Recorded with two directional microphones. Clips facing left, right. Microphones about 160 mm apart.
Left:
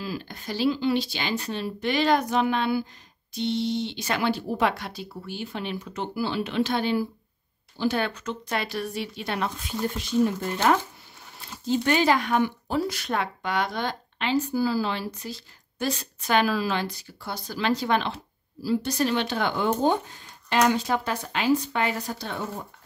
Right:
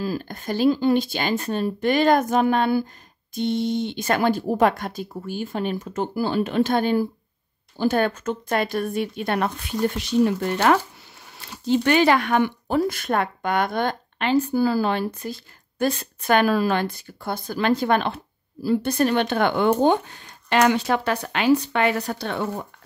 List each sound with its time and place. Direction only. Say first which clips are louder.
0.0 s speech: right 6 dB; 45° right (ahead or behind); by 22.5 s 70° right (ahead or behind)